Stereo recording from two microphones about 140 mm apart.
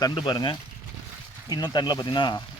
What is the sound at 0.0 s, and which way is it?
A man's voice, 35° left (ahead or behind).